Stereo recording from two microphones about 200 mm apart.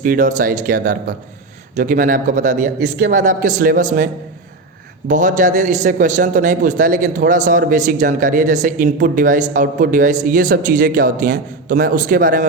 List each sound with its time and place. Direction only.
0.0 s a man's voice: 40° right (ahead or behind)